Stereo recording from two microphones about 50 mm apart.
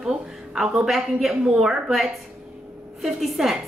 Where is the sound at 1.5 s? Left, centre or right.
Centre.